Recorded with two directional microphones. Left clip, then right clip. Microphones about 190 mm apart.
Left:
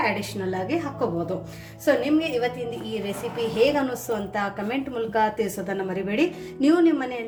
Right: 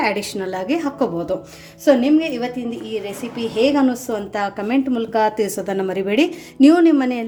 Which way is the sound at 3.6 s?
45° right (ahead or behind).